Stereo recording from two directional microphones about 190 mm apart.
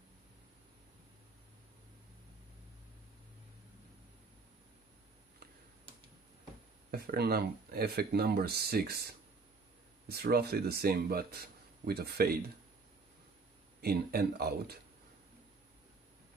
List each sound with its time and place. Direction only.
6.9 s a man's voice: 50° right (ahead or behind)
13.7 s a man's voice: 55° right (ahead or behind)